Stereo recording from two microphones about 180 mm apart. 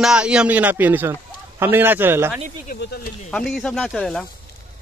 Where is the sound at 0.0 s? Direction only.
5° right (ahead or behind).